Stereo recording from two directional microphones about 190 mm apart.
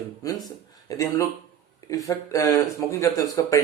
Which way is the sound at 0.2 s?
20° left (ahead or behind).